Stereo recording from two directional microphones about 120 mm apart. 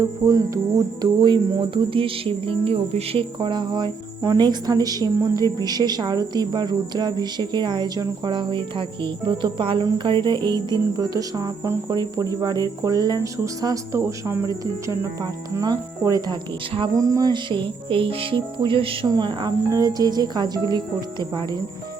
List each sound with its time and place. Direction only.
0.0 s speech: 25° right (ahead or behind)
1.2 s cricket: 40° right (ahead or behind)
4.2 s a woman's voice: 35° right (ahead or behind)
16.9 s cricket: 30° right (ahead or behind); by 18.9 s 45° right (ahead or behind)
19.0 s a woman's voice: 40° right (ahead or behind)